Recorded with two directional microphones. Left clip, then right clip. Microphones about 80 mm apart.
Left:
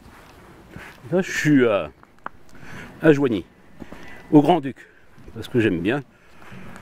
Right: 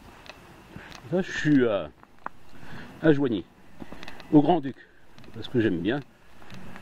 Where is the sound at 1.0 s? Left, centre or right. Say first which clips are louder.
Left 5 dB; centre.